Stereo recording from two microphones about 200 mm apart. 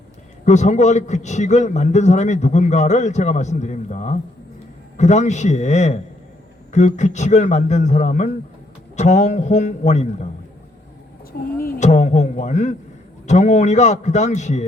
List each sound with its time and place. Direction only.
0.4 s a man's voice: 35° left (ahead or behind)
11.6 s a man's voice: 35° left (ahead or behind)